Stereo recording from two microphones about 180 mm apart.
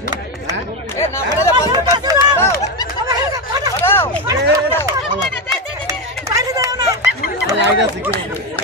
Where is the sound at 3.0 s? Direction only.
20° right (ahead or behind).